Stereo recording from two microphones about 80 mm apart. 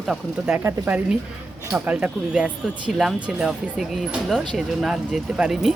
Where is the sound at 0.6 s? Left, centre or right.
Right.